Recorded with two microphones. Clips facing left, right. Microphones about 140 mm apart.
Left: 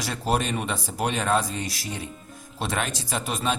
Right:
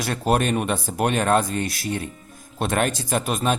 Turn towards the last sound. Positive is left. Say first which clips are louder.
# right 5 dB
turn(degrees=-55)  # may be behind; listen again after turning